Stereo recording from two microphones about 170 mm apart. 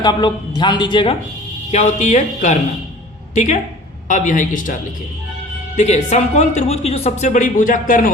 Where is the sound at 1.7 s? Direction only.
45° left (ahead or behind).